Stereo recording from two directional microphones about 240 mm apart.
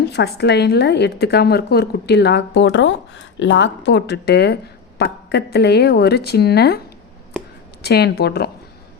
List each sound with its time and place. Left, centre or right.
0.1 s a woman's voice: left
7.8 s a woman's voice: left